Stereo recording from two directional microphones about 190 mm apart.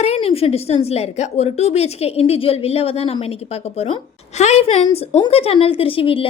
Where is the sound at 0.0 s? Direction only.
30° left (ahead or behind).